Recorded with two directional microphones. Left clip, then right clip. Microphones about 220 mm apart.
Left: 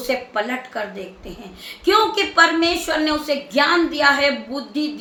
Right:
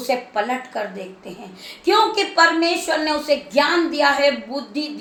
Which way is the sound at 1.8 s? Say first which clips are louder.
Even; 10° left (ahead or behind).